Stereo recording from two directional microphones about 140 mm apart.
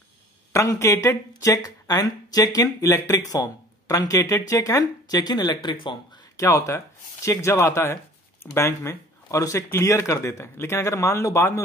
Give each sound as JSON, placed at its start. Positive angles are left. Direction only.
{"t": 0.5, "sound": "speech", "side_deg": 20}